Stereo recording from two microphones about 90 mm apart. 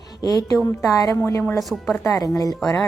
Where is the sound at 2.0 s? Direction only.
40° left (ahead or behind).